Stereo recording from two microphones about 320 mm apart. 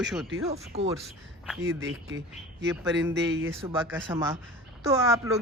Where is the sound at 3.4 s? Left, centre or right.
Centre.